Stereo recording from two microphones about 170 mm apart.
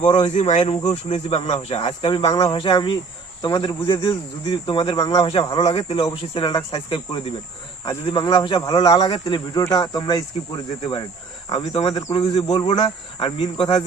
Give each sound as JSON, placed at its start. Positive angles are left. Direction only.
{"t": 0.0, "sound": "speech", "side_deg": 45}
{"t": 0.6, "sound": "speech", "side_deg": 25}
{"t": 11.4, "sound": "speech", "side_deg": 30}